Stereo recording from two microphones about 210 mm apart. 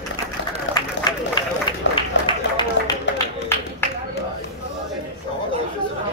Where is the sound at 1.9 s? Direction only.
25° left (ahead or behind).